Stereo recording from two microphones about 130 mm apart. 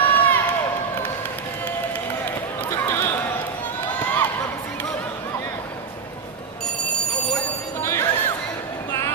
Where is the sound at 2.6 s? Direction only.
15° left (ahead or behind).